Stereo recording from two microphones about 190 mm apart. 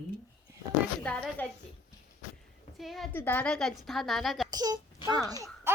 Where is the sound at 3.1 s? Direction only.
10° left (ahead or behind).